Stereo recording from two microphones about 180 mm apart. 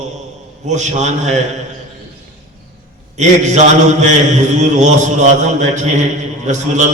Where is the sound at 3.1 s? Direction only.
40° right (ahead or behind).